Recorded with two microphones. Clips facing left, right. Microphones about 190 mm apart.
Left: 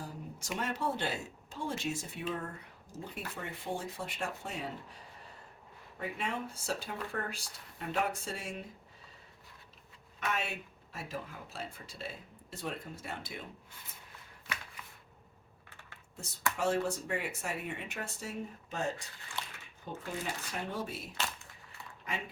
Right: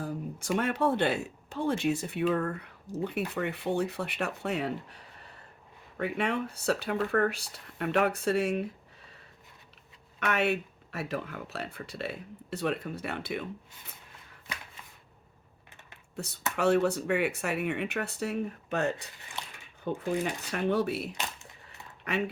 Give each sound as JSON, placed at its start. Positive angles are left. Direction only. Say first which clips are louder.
{"t": 0.0, "sound": "speech", "louder": "right 9 dB", "side_deg": -55}
{"t": 10.2, "sound": "speech", "louder": "right 9 dB", "side_deg": -65}
{"t": 16.1, "sound": "speech", "louder": "right 4 dB", "side_deg": -65}
{"t": 19.4, "sound": "a sound", "louder": "right 1 dB", "side_deg": -20}
{"t": 19.9, "sound": "speech", "louder": "right 9 dB", "side_deg": -65}